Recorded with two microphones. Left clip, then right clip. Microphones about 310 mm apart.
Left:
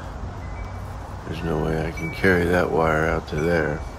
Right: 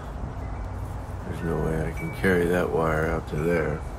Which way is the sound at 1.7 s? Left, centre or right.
Left.